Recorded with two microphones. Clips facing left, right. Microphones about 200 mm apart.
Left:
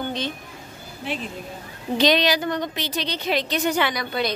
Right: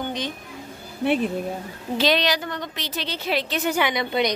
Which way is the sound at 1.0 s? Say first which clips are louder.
Right 9 dB; 60° right (ahead or behind).